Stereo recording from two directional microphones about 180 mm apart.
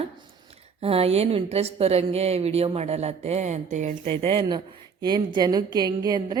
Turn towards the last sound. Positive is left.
turn(degrees=-20)  # may be behind; listen again after turning